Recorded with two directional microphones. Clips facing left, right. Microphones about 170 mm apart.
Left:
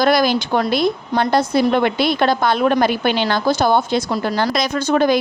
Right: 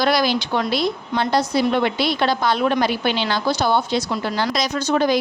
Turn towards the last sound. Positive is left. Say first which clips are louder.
# left 3 dB
turn(degrees=55)  # may be behind; listen again after turning